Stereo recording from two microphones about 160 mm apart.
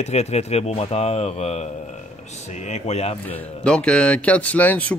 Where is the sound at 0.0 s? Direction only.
45° left (ahead or behind).